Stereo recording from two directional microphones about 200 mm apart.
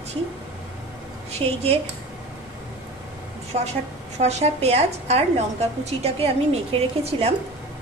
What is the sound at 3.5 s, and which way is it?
A woman's voice, 30° right (ahead or behind).